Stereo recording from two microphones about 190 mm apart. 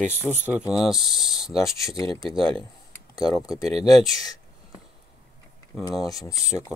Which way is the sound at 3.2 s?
Centre (ahead or behind).